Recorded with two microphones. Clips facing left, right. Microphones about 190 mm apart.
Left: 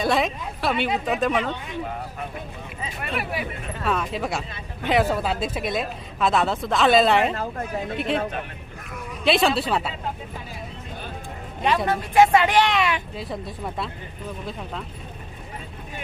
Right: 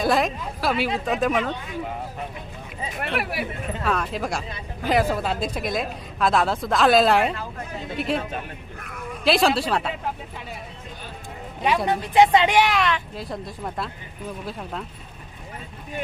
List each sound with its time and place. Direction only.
0.0 s speech: centre (ahead or behind)
3.0 s speech: 75° right (ahead or behind)
3.8 s speech: centre (ahead or behind)
9.2 s speech: centre (ahead or behind)
11.9 s speech: 15° right (ahead or behind)
12.8 s speech: 5° left (ahead or behind)